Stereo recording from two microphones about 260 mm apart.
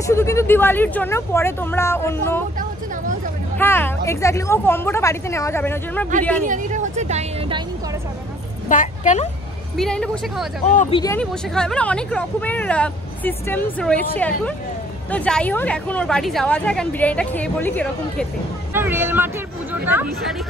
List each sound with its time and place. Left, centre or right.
0.0 s speech: centre
3.5 s speech: centre
6.4 s speech: right
8.6 s speech: left
9.8 s speech: centre
10.7 s speech: left
11.0 s speech: centre
18.7 s speech: centre